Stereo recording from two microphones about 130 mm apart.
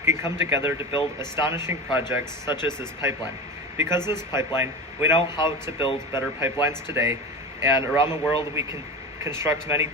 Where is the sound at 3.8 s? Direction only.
20° right (ahead or behind).